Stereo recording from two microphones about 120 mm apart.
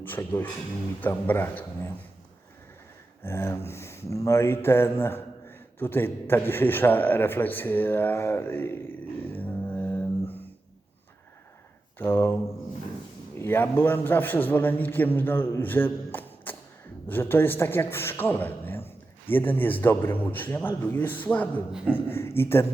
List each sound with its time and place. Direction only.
0.0 s speech: 15° left (ahead or behind)
3.2 s speech: 20° left (ahead or behind)
9.2 s music: 15° left (ahead or behind)
11.9 s speech: 20° left (ahead or behind)
13.4 s a woman's voice: 15° left (ahead or behind)